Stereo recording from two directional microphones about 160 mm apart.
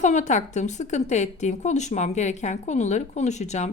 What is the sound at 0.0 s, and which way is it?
A woman's voice, 50° left (ahead or behind).